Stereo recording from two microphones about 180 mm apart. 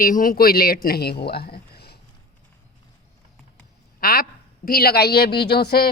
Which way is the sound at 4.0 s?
55° left (ahead or behind).